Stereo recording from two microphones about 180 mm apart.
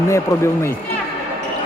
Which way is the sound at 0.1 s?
15° left (ahead or behind).